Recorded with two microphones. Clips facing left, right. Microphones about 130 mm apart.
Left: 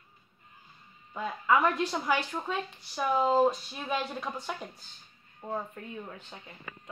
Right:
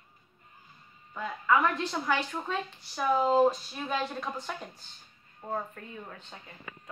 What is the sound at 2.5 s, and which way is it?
A woman's voice, centre (ahead or behind).